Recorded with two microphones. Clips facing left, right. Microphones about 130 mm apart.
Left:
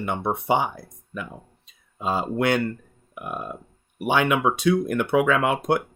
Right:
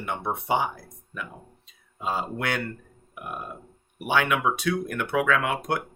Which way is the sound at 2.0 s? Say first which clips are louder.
Left 6 dB; 25° left (ahead or behind).